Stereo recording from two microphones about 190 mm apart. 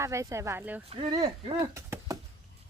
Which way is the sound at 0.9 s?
25° right (ahead or behind).